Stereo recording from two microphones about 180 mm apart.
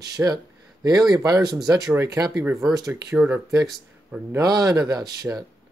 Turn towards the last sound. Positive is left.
turn(degrees=-20)  # may be behind; listen again after turning